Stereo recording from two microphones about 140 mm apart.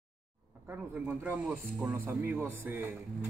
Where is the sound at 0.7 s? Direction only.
15° right (ahead or behind).